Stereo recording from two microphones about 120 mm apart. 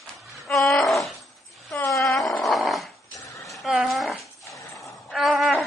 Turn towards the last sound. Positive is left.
turn(degrees=0)  # may be behind; listen again after turning